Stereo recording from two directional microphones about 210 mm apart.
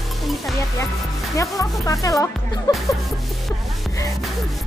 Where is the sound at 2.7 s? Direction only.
Centre (ahead or behind).